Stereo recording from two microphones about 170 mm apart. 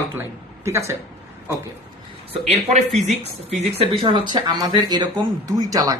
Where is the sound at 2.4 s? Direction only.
40° right (ahead or behind); by 5.9 s 20° right (ahead or behind).